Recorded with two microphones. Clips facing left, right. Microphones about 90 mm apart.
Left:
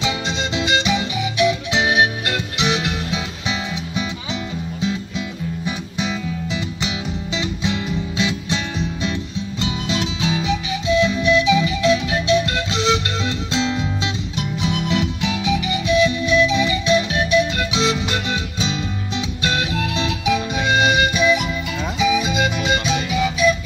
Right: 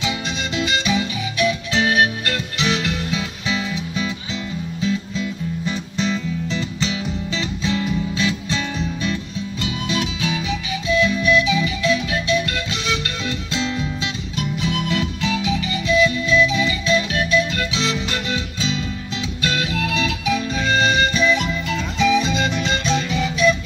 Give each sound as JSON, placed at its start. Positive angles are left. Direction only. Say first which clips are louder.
{"t": 0.6, "sound": "music", "louder": "left 1 dB", "side_deg": 25}
{"t": 5.7, "sound": "music", "louder": "right 3 dB", "side_deg": 10}